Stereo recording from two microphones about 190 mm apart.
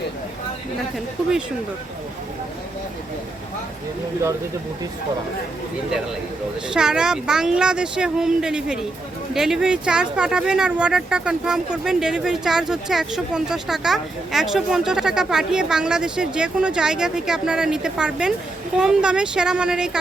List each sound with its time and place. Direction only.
6.7 s speech: 5° right (ahead or behind)